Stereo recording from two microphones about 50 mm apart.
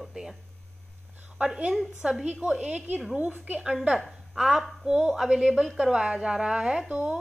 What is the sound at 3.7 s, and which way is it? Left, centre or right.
A woman's voice, centre.